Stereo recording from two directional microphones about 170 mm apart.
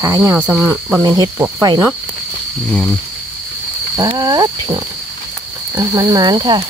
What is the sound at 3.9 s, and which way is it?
Speech, 25° right (ahead or behind).